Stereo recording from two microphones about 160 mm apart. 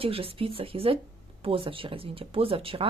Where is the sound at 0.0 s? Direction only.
35° right (ahead or behind).